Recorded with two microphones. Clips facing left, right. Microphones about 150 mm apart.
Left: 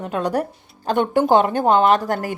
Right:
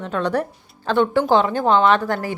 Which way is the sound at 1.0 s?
50° left (ahead or behind).